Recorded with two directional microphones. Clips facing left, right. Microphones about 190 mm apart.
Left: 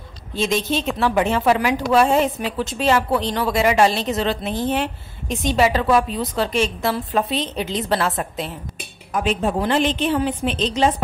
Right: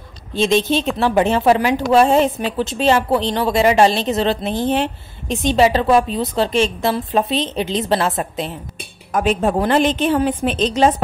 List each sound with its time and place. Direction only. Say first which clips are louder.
0.4 s a woman's voice: right 5 dB; 25° right (ahead or behind)
9.1 s a woman's voice: right 4 dB; 45° right (ahead or behind)